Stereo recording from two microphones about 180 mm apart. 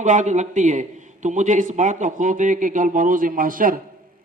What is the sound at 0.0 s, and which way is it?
A man's voice, 45° right (ahead or behind).